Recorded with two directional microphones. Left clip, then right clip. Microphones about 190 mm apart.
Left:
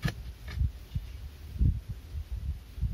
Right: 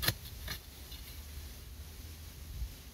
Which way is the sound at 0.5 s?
5° left (ahead or behind).